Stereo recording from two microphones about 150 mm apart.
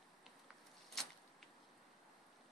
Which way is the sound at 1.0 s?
5° left (ahead or behind).